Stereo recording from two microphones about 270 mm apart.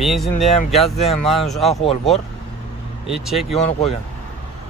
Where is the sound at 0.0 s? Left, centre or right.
Centre.